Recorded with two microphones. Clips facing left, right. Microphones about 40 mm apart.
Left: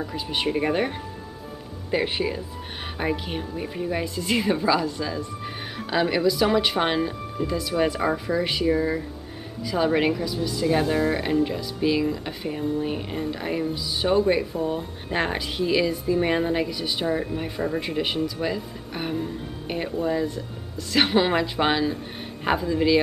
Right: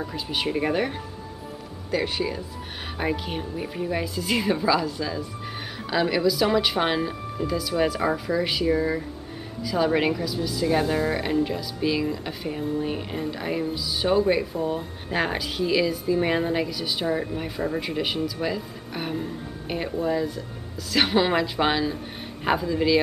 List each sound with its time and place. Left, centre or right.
0.3 s speech: centre
1.9 s speech: left
3.0 s speech: centre